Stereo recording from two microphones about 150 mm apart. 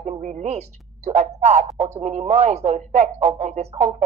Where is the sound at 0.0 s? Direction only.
55° right (ahead or behind).